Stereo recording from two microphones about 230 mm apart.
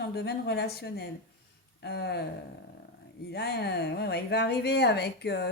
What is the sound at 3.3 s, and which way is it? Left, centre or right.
Speech, left.